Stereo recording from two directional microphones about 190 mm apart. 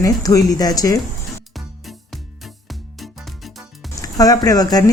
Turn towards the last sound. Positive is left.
turn(degrees=20)  # may be behind; listen again after turning